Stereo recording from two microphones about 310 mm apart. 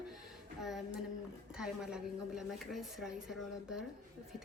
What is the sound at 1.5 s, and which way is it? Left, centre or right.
Speech, centre.